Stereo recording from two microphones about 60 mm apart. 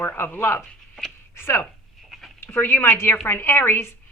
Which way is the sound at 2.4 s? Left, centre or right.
Left.